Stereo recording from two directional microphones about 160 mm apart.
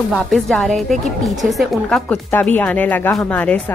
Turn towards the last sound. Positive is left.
turn(degrees=10)  # may be behind; listen again after turning